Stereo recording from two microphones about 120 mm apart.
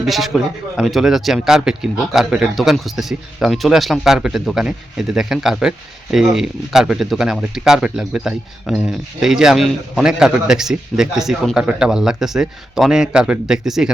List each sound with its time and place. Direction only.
0.0 s a man's voice: centre (ahead or behind)